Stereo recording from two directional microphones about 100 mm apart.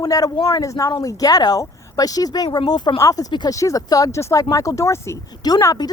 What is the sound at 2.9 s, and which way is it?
Speech, 35° left (ahead or behind).